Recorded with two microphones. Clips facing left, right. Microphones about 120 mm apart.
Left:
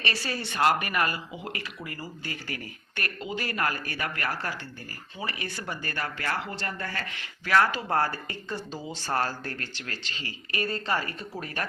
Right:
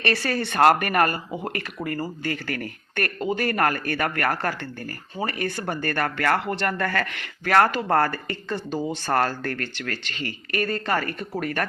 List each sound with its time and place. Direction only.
0.0 s speech: 55° right (ahead or behind)